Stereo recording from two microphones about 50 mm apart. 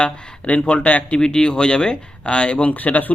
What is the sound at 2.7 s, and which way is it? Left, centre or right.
Speech, left.